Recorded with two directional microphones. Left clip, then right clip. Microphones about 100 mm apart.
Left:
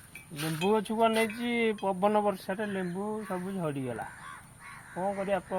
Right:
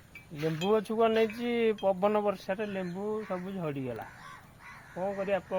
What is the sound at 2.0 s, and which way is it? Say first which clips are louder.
Speech: left 1 dB; centre (ahead or behind).